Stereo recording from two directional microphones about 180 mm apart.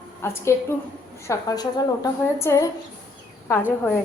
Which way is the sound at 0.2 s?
15° left (ahead or behind).